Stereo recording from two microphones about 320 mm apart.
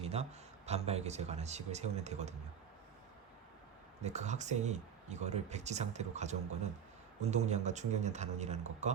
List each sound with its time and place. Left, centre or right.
0.0 s speech: centre
4.0 s speech: right